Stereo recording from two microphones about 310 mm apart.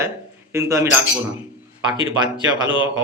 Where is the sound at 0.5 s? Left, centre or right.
Centre.